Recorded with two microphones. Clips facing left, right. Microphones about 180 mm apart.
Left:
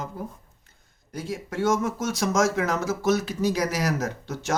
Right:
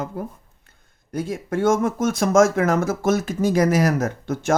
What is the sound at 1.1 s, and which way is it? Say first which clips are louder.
Speech: right 7 dB; 55° right (ahead or behind).